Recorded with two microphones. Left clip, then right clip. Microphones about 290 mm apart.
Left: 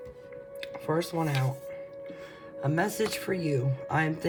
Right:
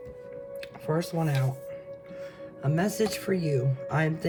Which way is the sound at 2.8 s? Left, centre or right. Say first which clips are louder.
Right 1 dB; left.